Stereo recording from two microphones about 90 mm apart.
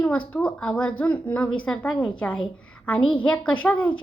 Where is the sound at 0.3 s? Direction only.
10° left (ahead or behind).